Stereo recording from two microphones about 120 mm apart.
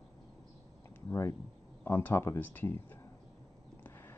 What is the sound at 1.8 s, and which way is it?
Speech, 20° left (ahead or behind).